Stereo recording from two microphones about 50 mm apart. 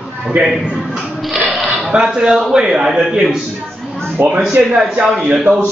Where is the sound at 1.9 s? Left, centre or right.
Centre.